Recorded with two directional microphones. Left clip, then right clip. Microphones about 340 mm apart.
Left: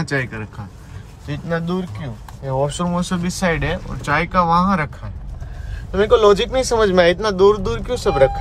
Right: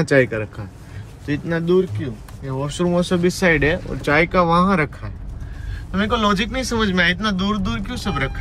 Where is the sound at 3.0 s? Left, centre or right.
Centre.